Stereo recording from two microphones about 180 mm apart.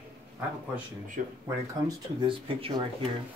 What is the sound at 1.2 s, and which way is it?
Speech, 55° right (ahead or behind).